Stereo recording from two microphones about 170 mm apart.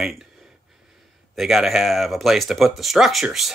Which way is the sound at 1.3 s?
Centre (ahead or behind).